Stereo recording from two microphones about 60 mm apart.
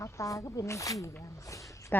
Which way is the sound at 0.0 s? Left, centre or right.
Left.